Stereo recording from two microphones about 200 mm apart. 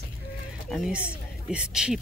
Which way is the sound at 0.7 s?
5° right (ahead or behind).